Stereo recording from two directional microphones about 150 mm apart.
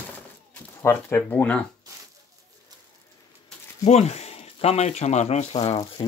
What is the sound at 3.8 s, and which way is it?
Speech, 45° left (ahead or behind).